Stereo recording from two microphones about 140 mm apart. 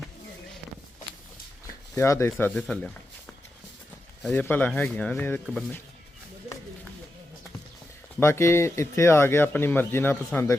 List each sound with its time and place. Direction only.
2.0 s speech: 20° left (ahead or behind)
4.2 s speech: 10° left (ahead or behind)
8.2 s speech: 20° left (ahead or behind)